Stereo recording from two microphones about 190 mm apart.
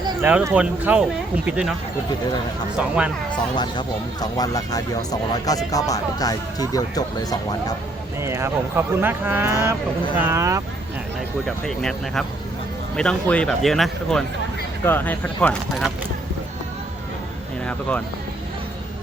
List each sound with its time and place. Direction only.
0.2 s speech: 10° right (ahead or behind)
2.7 s speech: 5° right (ahead or behind)
3.5 s speech: 25° left (ahead or behind)
8.2 s speech: 15° right (ahead or behind)
11.4 s speech: 5° left (ahead or behind)
17.7 s speech: 5° left (ahead or behind)